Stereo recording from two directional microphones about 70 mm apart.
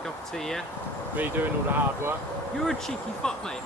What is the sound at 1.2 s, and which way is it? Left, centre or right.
Speech, right.